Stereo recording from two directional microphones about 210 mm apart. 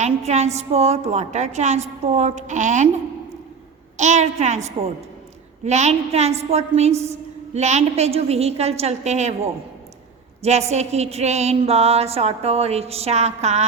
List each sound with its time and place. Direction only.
0.0 s a woman's voice: 30° right (ahead or behind)
3.9 s a woman's voice: 35° right (ahead or behind)
10.4 s a sound: 30° right (ahead or behind)